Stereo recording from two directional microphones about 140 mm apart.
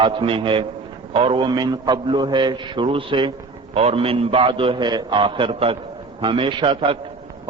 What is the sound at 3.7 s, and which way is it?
A man's voice, 45° right (ahead or behind).